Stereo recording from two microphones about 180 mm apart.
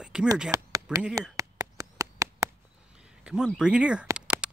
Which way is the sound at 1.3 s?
20° right (ahead or behind).